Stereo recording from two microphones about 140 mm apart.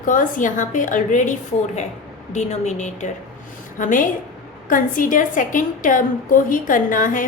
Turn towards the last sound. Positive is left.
turn(degrees=75)  # may be behind; listen again after turning